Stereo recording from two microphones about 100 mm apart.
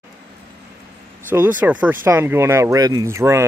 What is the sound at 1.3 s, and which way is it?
Speech, 20° right (ahead or behind).